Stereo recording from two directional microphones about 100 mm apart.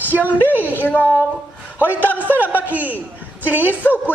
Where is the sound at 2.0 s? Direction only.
20° left (ahead or behind).